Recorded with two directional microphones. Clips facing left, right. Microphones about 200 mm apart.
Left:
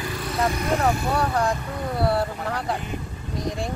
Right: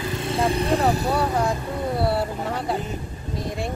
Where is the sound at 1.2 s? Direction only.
5° right (ahead or behind).